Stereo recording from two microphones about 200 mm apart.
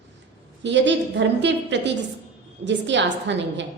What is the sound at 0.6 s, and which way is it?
A woman's voice, 65° right (ahead or behind).